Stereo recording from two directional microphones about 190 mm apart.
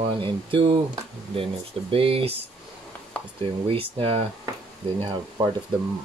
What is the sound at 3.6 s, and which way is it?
Speech, 30° right (ahead or behind).